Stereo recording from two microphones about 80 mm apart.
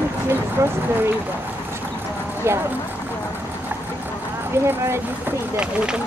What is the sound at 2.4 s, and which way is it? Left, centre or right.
Speech, right.